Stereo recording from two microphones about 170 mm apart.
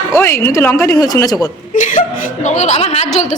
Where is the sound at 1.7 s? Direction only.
50° left (ahead or behind).